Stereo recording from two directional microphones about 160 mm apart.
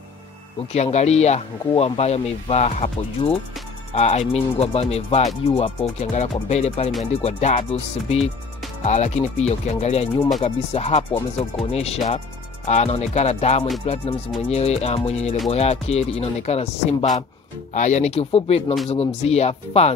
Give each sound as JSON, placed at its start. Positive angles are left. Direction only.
{"t": 0.7, "sound": "speech", "side_deg": 45}